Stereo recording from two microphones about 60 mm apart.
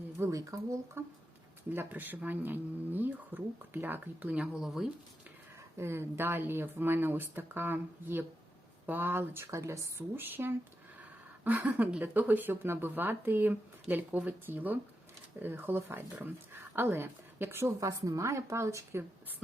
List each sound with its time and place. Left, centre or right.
0.3 s a woman's voice: right
1.7 s speech: right
4.5 s speech: centre
5.7 s speech: right
10.2 s a woman's voice: right
17.7 s a woman's voice: right